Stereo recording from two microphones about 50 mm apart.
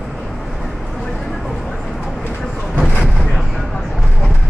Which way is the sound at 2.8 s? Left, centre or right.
Left.